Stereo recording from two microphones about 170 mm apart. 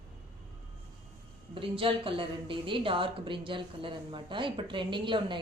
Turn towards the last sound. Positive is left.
turn(degrees=-30)  # may be behind; listen again after turning